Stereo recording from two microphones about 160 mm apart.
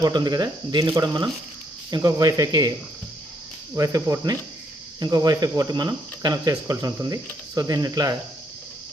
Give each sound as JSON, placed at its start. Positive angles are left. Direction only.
{"t": 0.0, "sound": "speech", "side_deg": -25}
{"t": 3.8, "sound": "speech", "side_deg": -20}